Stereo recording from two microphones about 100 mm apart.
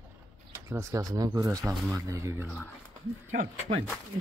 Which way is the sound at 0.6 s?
30° right (ahead or behind).